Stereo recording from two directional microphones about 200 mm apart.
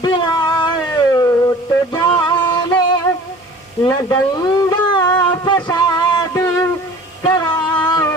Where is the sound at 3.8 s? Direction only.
20° left (ahead or behind).